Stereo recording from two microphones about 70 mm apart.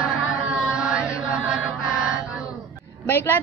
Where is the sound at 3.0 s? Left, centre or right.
Left.